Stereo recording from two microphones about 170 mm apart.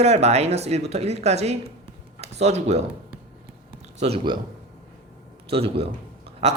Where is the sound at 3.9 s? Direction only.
40° right (ahead or behind).